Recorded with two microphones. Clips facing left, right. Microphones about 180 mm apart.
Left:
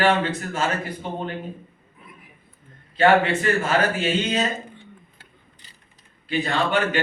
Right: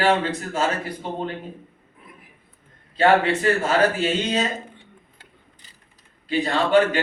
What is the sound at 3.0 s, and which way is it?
Speech, 35° right (ahead or behind).